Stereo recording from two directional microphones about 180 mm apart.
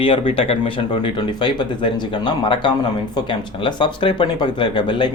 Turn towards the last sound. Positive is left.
turn(degrees=25)  # may be behind; listen again after turning